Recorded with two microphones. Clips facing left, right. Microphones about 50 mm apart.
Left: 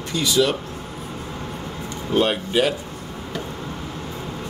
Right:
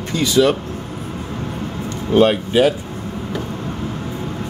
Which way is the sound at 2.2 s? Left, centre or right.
Centre.